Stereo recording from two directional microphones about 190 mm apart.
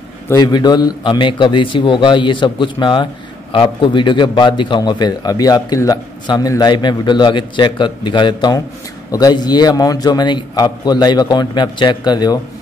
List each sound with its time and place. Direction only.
0.3 s a man's voice: 20° left (ahead or behind)